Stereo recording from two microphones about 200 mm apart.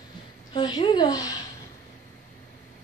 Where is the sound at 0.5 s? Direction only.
20° left (ahead or behind).